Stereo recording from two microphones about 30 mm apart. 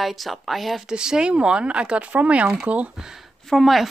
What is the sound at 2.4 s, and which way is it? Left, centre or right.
Speech, right.